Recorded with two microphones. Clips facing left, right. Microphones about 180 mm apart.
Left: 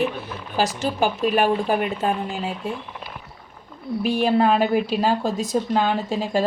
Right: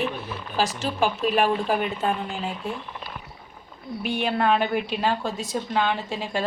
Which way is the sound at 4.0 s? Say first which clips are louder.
Left 5 dB; 35° left (ahead or behind).